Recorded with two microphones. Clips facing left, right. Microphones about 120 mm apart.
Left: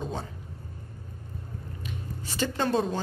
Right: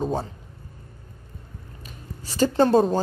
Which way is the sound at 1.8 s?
40° right (ahead or behind).